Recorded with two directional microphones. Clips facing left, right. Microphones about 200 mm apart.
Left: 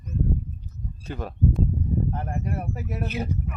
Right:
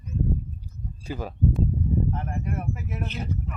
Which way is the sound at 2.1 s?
35° left (ahead or behind).